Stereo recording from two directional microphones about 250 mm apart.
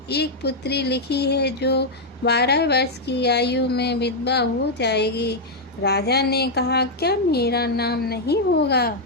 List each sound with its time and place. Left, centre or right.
0.1 s speech: left